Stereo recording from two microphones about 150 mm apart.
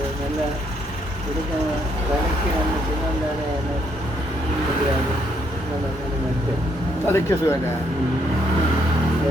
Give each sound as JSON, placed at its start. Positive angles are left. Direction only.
{"t": 7.1, "sound": "speech", "side_deg": 20}